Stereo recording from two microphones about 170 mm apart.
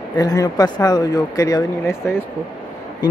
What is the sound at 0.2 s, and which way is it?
Speech, 20° left (ahead or behind).